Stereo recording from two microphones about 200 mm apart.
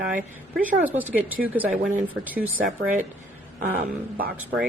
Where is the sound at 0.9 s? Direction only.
10° right (ahead or behind).